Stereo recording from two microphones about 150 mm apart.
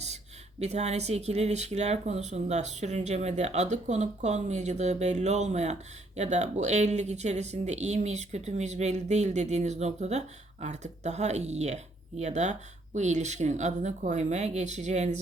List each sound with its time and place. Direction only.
0.6 s speech: 45° right (ahead or behind)